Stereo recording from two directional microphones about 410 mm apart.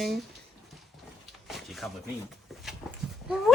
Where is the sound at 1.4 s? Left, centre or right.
Centre.